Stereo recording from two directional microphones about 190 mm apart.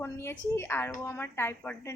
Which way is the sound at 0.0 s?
15° left (ahead or behind).